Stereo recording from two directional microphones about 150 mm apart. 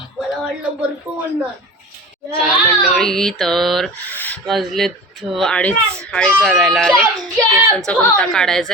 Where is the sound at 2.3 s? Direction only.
5° left (ahead or behind).